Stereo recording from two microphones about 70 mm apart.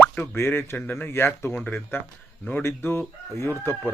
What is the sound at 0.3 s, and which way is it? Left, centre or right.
Speech, left.